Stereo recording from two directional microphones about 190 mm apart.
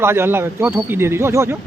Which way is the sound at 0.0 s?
10° right (ahead or behind).